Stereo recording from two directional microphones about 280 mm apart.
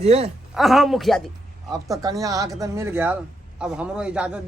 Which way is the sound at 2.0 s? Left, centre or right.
Centre.